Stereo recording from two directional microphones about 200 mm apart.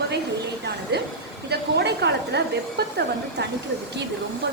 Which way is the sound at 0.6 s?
55° right (ahead or behind).